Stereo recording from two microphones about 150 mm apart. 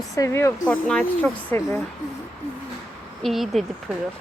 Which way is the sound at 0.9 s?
5° left (ahead or behind).